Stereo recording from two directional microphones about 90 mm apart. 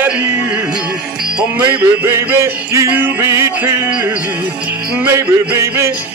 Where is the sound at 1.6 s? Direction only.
25° right (ahead or behind).